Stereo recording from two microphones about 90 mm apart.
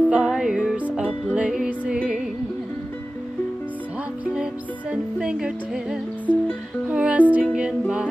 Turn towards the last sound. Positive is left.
turn(degrees=-15)  # may be behind; listen again after turning